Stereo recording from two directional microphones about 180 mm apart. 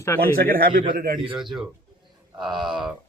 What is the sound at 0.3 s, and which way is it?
Speech, 55° right (ahead or behind).